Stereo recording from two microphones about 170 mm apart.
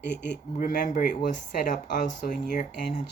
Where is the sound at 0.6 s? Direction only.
65° left (ahead or behind); by 3.1 s 45° left (ahead or behind).